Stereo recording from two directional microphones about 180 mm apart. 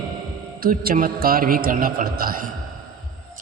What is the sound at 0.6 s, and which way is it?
Music, 55° right (ahead or behind).